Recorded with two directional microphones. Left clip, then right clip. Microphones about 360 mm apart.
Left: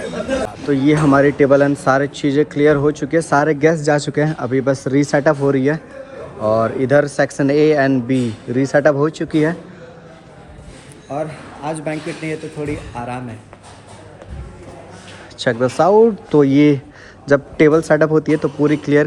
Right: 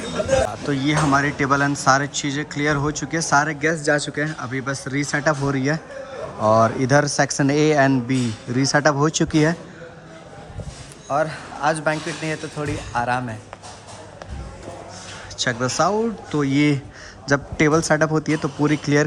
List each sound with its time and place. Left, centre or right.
0.7 s speech: centre
11.1 s a man's voice: centre
12.2 s speech: right
13.0 s speech: centre
15.4 s speech: centre